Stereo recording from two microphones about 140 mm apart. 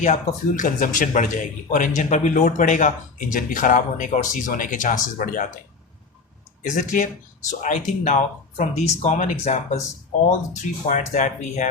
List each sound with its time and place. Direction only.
0.0 s speech: 60° left (ahead or behind)
6.7 s speech: 65° left (ahead or behind)